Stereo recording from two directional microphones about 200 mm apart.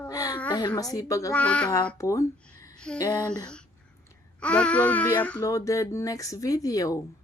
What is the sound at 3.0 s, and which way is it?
Speech, 20° left (ahead or behind).